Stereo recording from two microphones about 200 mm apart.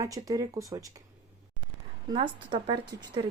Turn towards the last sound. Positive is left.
turn(degrees=-20)  # may be behind; listen again after turning